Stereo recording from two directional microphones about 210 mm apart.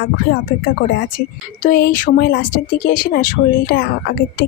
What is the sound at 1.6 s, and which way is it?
Speech, 45° left (ahead or behind).